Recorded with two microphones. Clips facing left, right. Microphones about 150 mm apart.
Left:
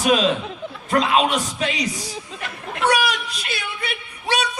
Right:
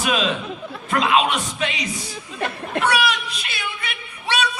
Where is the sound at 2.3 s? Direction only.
35° right (ahead or behind).